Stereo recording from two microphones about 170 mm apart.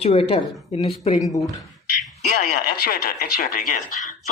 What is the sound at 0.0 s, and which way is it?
Speech, 35° left (ahead or behind).